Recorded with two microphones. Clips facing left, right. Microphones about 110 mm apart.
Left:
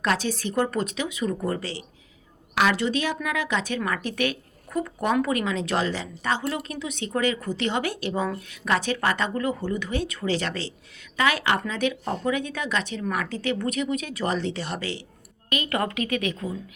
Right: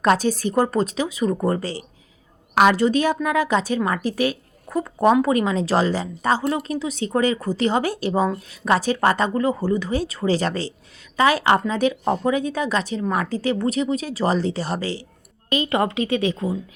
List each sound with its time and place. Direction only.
0.0 s a woman's voice: 40° right (ahead or behind)
3.8 s a woman's voice: 25° right (ahead or behind)